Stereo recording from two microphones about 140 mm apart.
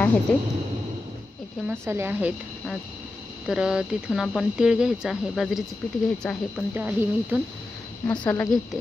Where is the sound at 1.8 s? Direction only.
15° right (ahead or behind).